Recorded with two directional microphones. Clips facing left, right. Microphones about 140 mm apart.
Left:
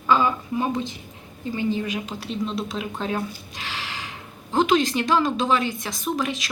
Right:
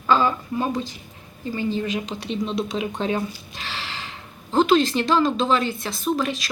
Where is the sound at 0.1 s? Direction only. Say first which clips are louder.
Right 1 dB; 10° left (ahead or behind).